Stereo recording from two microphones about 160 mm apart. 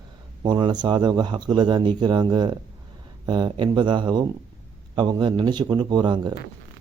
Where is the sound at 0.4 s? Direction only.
30° right (ahead or behind).